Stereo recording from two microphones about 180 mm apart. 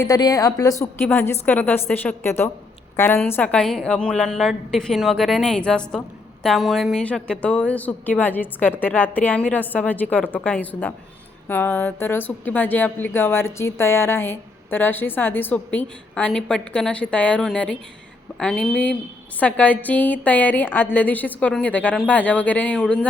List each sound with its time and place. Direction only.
0.0 s a woman's voice: 20° left (ahead or behind)
1.0 s a woman's voice: 10° left (ahead or behind)